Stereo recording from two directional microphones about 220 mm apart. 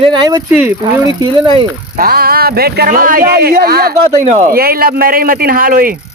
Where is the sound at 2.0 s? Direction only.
45° right (ahead or behind).